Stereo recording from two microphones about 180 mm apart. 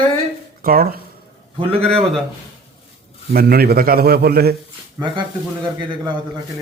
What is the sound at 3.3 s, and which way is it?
A man's voice, 55° right (ahead or behind).